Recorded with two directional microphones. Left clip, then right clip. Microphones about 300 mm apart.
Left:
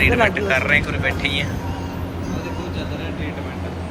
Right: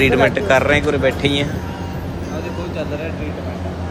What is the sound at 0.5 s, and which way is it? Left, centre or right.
Speech, centre.